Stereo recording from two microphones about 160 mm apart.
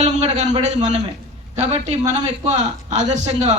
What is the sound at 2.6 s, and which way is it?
Speech, 50° right (ahead or behind).